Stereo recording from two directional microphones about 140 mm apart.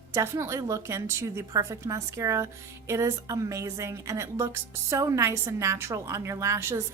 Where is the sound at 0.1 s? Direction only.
20° right (ahead or behind).